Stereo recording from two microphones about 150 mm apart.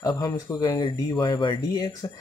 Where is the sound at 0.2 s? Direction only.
25° left (ahead or behind).